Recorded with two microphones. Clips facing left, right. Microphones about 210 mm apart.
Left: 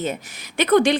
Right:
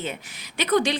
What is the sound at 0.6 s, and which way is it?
Speech, 55° left (ahead or behind).